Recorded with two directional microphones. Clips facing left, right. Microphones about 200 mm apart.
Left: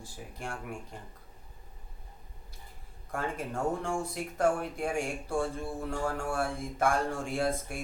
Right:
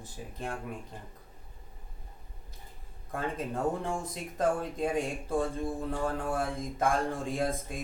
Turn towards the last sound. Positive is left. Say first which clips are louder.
# left 1 dB
turn(degrees=-15)  # may be behind; listen again after turning